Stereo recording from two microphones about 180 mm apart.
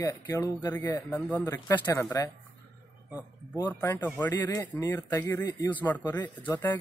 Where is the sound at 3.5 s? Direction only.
15° left (ahead or behind).